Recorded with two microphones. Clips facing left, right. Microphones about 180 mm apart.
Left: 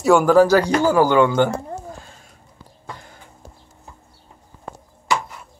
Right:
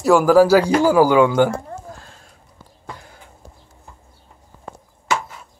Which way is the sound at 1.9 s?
Centre (ahead or behind).